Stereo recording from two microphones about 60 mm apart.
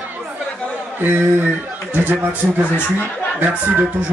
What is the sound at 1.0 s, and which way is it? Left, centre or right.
A man's voice, right.